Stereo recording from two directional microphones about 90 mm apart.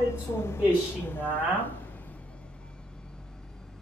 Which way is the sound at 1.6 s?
20° left (ahead or behind).